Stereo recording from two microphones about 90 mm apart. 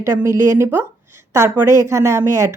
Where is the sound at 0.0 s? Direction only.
35° right (ahead or behind).